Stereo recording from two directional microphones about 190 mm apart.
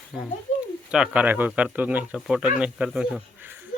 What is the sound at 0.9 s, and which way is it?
Speech, 5° right (ahead or behind).